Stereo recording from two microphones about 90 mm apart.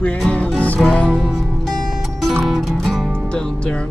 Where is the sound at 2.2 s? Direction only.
Centre (ahead or behind).